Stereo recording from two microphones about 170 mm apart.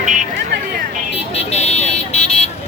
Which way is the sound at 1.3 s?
40° left (ahead or behind).